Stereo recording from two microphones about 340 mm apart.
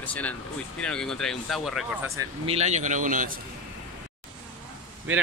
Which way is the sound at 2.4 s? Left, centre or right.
Centre.